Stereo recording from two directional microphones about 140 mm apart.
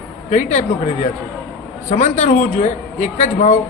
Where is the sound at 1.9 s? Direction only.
55° left (ahead or behind).